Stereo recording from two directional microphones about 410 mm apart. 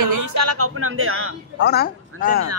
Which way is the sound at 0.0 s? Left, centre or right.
Right.